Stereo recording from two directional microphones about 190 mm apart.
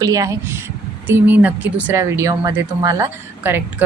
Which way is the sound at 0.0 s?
20° right (ahead or behind).